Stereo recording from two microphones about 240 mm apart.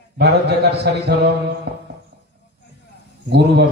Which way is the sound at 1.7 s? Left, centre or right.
Right.